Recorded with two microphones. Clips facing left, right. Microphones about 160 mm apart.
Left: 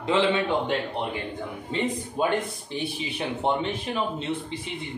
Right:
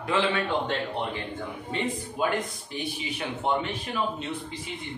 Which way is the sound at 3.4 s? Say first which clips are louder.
Left 1 dB; 25° left (ahead or behind).